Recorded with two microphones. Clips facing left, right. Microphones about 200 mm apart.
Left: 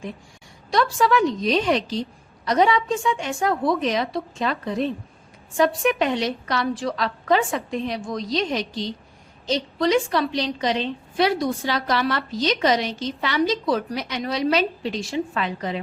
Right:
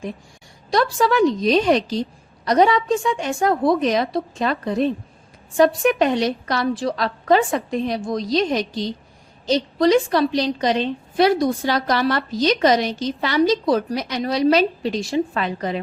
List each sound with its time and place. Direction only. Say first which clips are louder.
0.7 s a woman's voice: right 1 dB; 35° right (ahead or behind)